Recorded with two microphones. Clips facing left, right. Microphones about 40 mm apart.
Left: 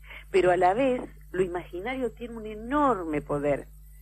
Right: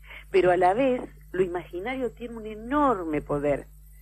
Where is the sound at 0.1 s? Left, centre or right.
Centre.